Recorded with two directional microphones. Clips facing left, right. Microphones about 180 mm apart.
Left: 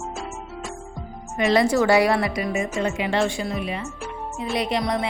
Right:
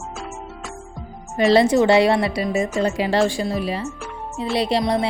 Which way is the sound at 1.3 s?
35° right (ahead or behind).